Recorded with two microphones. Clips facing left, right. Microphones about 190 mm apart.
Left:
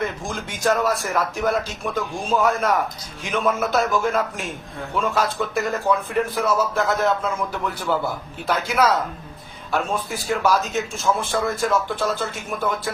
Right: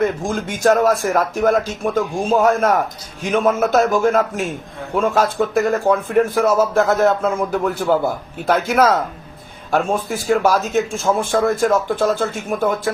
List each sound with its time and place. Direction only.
0.0 s a man's voice: 45° right (ahead or behind)